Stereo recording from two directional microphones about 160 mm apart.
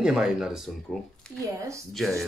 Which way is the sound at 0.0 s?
5° right (ahead or behind).